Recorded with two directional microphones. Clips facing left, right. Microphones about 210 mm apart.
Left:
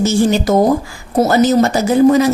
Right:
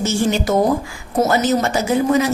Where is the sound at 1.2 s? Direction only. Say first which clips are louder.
Left 5 dB; 35° left (ahead or behind).